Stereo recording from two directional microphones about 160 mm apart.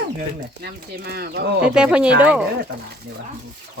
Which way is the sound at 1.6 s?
5° right (ahead or behind).